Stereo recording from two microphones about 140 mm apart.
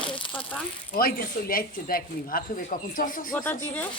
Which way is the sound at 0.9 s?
90° left.